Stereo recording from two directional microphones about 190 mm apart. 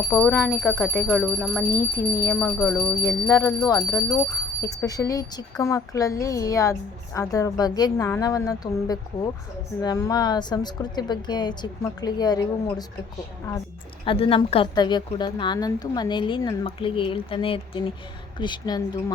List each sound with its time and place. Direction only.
0.1 s speech: 10° left (ahead or behind)
1.7 s a woman's voice: 15° left (ahead or behind)
14.0 s a woman's voice: 30° left (ahead or behind)